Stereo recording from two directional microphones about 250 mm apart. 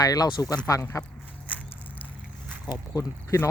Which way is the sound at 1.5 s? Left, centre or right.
Centre.